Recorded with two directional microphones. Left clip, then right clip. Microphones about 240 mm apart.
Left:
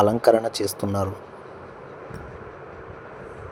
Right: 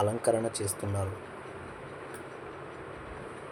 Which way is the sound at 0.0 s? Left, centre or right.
Left.